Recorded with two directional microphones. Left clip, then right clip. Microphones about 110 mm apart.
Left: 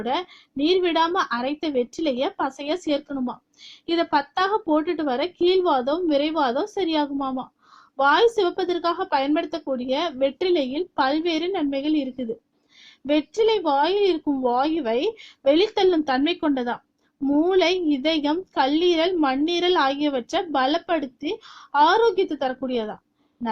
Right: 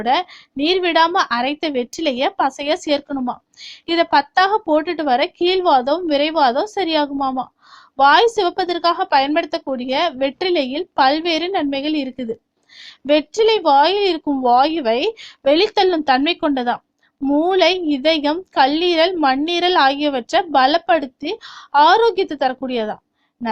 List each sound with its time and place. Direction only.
0.0 s a woman's voice: 20° right (ahead or behind)